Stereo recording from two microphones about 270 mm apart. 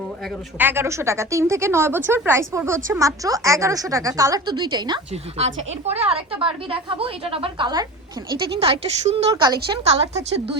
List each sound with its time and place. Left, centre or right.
0.6 s a woman's voice: centre